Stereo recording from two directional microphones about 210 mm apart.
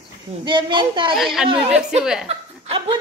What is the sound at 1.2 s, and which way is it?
Speech, centre (ahead or behind).